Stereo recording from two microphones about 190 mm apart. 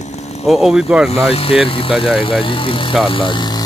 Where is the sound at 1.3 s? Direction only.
30° left (ahead or behind).